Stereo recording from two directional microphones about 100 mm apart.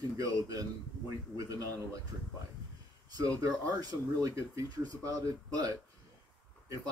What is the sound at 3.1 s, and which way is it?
Speech, 40° right (ahead or behind).